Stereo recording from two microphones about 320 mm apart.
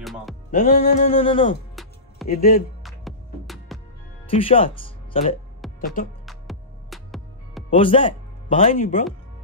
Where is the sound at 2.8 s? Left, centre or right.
Centre.